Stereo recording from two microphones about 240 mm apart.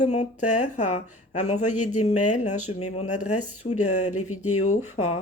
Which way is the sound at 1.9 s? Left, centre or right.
Left.